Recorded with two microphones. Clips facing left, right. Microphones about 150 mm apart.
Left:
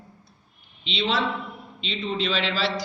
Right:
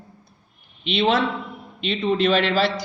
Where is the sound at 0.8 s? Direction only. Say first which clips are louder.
Right 6 dB; 55° right (ahead or behind).